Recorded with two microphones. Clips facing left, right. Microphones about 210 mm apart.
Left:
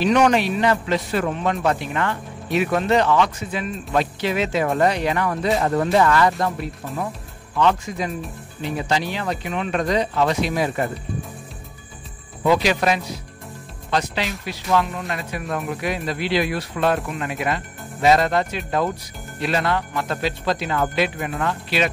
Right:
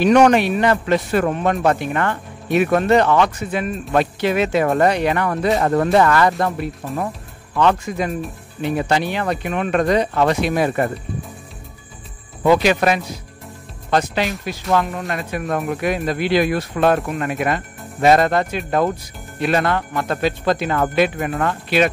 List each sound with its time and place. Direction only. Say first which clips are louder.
0.0 s speech: right 4 dB; 50° right (ahead or behind)
7.5 s speech: right 2 dB; 55° right (ahead or behind)
12.4 s speech: right 3 dB; 55° right (ahead or behind)